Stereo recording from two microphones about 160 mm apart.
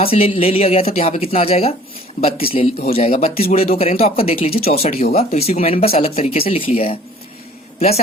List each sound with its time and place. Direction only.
0.0 s a man's voice: 35° left (ahead or behind)